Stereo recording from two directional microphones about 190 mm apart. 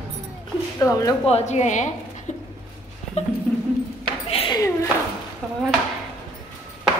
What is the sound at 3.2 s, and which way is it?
Speech, 35° left (ahead or behind).